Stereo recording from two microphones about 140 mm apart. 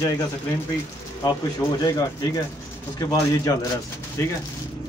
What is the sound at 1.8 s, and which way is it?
Speech, 25° left (ahead or behind).